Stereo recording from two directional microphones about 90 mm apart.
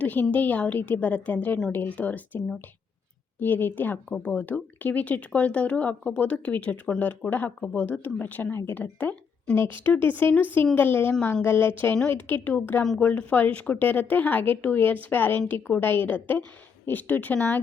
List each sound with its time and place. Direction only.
0.0 s speech: 15° left (ahead or behind)